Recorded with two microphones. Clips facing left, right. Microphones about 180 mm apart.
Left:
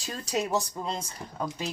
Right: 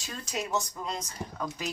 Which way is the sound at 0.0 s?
35° left (ahead or behind).